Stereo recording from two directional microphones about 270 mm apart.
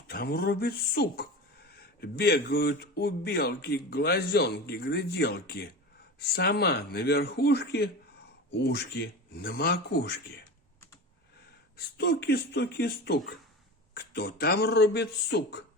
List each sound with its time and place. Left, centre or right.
0.1 s speech: left
11.9 s speech: left